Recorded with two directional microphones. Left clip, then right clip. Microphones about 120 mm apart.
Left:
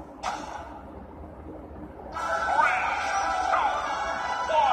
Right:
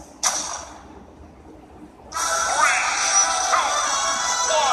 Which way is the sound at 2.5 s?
25° right (ahead or behind).